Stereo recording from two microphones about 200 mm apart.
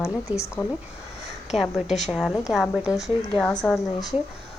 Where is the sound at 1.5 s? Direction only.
Centre (ahead or behind).